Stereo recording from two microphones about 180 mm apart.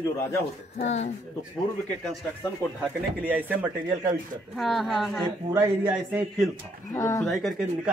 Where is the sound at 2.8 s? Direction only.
10° right (ahead or behind).